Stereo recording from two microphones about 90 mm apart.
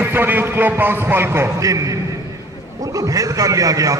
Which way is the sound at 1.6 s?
40° right (ahead or behind).